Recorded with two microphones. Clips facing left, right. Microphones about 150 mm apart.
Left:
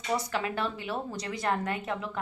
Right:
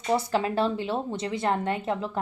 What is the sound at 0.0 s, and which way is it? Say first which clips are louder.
A woman's voice: right 5 dB; 30° right (ahead or behind).